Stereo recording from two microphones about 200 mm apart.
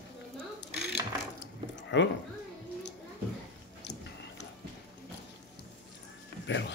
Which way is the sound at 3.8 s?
60° left (ahead or behind).